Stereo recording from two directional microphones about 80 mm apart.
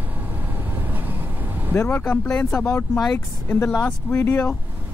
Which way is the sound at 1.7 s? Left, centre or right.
Left.